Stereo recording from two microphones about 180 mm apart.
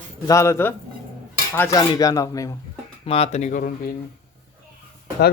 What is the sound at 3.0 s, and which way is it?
Speech, 35° left (ahead or behind).